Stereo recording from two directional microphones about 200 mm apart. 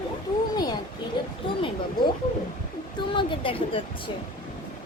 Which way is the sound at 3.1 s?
25° left (ahead or behind).